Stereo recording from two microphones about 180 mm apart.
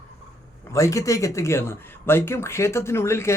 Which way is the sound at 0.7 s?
15° left (ahead or behind).